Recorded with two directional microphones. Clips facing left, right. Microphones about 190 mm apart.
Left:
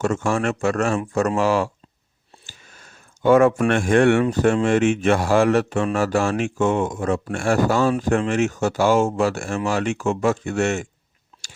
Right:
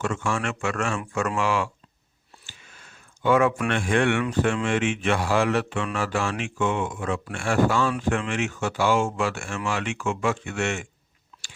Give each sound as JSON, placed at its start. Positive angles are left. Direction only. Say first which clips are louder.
{"t": 0.0, "sound": "speech", "louder": "left 6 dB", "side_deg": 40}